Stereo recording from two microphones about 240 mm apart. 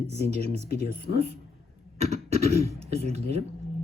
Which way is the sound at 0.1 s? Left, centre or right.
Right.